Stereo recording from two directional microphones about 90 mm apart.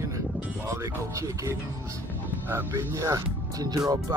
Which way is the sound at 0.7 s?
35° right (ahead or behind).